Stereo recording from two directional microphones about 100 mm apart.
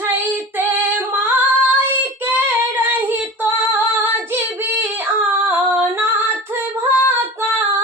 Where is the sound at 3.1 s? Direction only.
20° right (ahead or behind).